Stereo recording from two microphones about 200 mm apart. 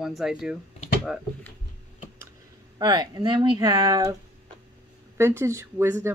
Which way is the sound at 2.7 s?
20° right (ahead or behind).